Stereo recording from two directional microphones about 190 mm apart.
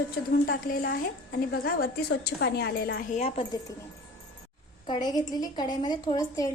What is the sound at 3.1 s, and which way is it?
Speech, 35° left (ahead or behind).